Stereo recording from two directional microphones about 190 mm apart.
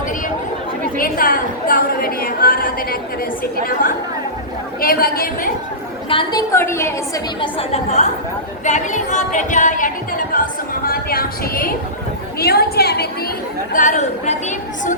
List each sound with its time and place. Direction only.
0.9 s music: 50° left (ahead or behind)
6.1 s a woman's voice: 25° left (ahead or behind)
6.5 s a woman's voice: 15° left (ahead or behind)
7.4 s a woman's voice: 35° left (ahead or behind)
8.6 s music: 40° left (ahead or behind)
12.4 s a woman's voice: 55° left (ahead or behind)
13.7 s a woman's voice: 40° left (ahead or behind)